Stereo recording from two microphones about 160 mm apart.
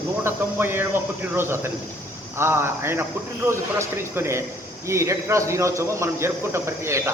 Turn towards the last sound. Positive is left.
turn(degrees=-15)  # may be behind; listen again after turning